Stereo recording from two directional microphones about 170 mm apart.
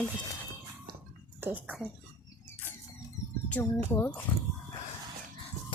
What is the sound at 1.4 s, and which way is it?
Speech, 10° right (ahead or behind).